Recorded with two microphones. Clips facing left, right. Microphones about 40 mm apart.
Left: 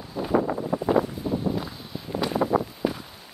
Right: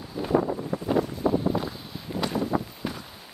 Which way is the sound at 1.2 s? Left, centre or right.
Right.